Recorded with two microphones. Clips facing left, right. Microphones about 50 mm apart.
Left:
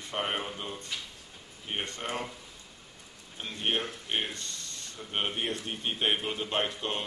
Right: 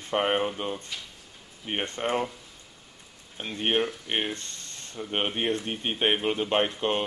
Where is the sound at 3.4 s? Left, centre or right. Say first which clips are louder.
Right 5 dB; right.